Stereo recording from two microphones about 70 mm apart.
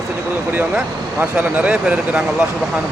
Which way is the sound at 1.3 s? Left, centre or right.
Centre.